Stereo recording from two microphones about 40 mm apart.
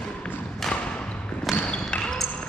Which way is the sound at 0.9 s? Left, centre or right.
Left.